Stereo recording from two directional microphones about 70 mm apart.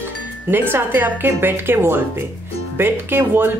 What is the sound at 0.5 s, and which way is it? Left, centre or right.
Speech, right.